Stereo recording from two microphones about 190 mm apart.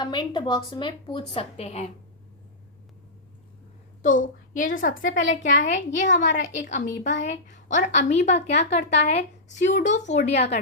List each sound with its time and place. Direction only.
0.0 s a woman's voice: 25° left (ahead or behind)
4.0 s a woman's voice: 45° left (ahead or behind)